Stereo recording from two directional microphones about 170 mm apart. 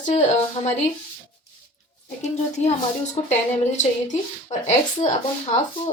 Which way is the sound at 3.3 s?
45° left (ahead or behind).